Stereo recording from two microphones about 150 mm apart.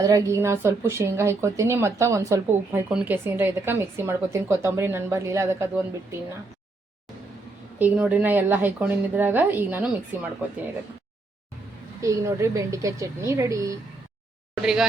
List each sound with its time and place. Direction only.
0.0 s a woman's voice: 25° right (ahead or behind)
7.8 s speech: 10° right (ahead or behind)
12.0 s a woman's voice: 20° right (ahead or behind)
14.5 s speech: 5° right (ahead or behind)